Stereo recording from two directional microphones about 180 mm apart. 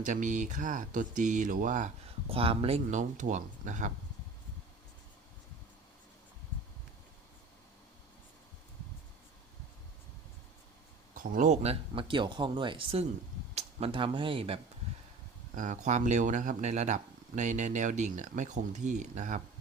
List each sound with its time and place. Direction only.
0.0 s speech: 45° right (ahead or behind)
2.3 s speech: 30° right (ahead or behind)
11.1 s speech: 50° right (ahead or behind); by 14.6 s 30° right (ahead or behind)
15.5 s speech: 40° right (ahead or behind)